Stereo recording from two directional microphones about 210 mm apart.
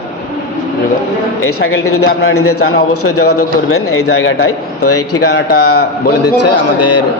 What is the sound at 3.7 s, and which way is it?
A man's voice, 75° left (ahead or behind).